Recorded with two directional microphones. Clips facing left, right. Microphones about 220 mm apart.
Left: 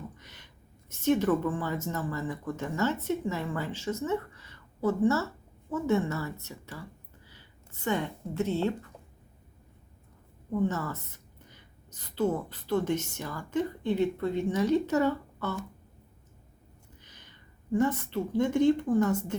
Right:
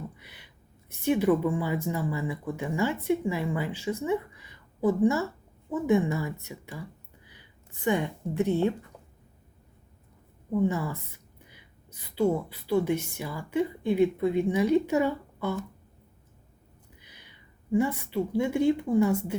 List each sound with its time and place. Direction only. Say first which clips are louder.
0.2 s a woman's voice: even; 10° right (ahead or behind)
10.5 s a woman's voice: right 3 dB; 10° right (ahead or behind)
17.0 s a woman's voice: even; 10° right (ahead or behind)